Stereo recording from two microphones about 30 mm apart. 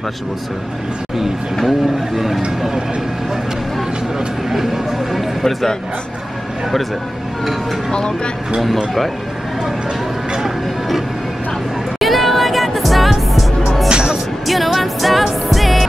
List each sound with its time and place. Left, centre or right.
1.7 s speech: centre
8.6 s speech: centre
12.0 s music: centre
13.8 s music: right
14.4 s music: centre